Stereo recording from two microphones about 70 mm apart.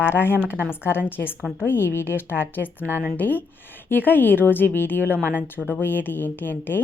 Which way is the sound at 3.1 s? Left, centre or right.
Left.